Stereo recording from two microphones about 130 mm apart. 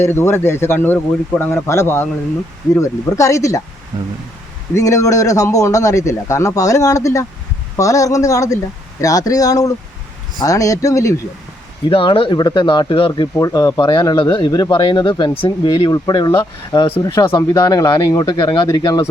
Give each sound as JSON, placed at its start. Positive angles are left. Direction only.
{"t": 0.0, "sound": "a man's voice", "side_deg": 20}
{"t": 4.7, "sound": "a man's voice", "side_deg": 25}
{"t": 11.9, "sound": "speech", "side_deg": 40}
{"t": 13.4, "sound": "a man's voice", "side_deg": 25}